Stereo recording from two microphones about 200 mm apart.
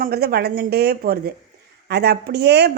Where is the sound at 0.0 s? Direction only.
50° right (ahead or behind).